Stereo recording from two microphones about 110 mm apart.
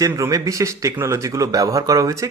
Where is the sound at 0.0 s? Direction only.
30° right (ahead or behind).